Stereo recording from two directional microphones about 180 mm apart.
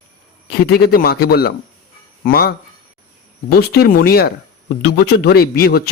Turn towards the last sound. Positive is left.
turn(degrees=60)  # may be behind; listen again after turning